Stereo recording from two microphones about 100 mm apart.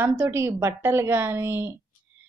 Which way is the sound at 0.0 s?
25° right (ahead or behind).